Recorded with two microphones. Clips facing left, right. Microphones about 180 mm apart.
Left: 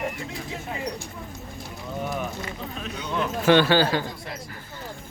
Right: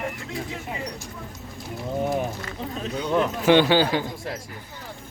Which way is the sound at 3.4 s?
15° right (ahead or behind).